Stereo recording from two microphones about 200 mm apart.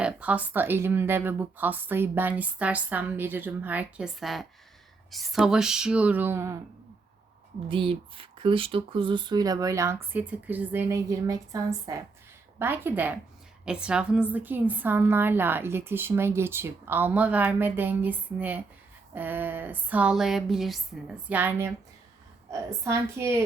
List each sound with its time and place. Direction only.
0.0 s a woman's voice: 5° right (ahead or behind)
7.7 s a woman's voice: 25° right (ahead or behind); by 21.7 s 10° right (ahead or behind)
22.8 s a woman's voice: 15° right (ahead or behind)